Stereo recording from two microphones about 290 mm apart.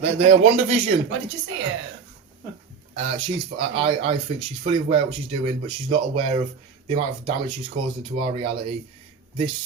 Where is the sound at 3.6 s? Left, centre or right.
Centre.